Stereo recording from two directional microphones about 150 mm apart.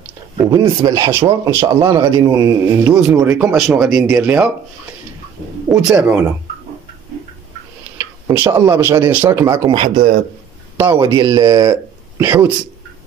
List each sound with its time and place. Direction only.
0.4 s speech: 25° right (ahead or behind)
3.0 s speech: 5° right (ahead or behind)
5.7 s speech: 5° right (ahead or behind)
8.0 s a sound: 15° right (ahead or behind)
8.5 s speech: 15° right (ahead or behind)
11.0 s speech: 25° right (ahead or behind)
11.7 s speech: 20° right (ahead or behind)